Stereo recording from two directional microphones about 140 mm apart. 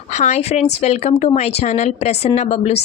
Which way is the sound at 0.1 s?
55° left (ahead or behind).